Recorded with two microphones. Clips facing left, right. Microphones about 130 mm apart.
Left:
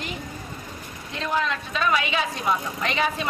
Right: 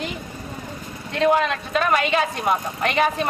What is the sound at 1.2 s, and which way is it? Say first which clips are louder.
A woman's voice: right 7 dB; 65° right (ahead or behind).